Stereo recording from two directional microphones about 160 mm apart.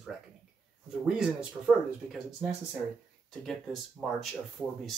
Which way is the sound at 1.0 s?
5° right (ahead or behind).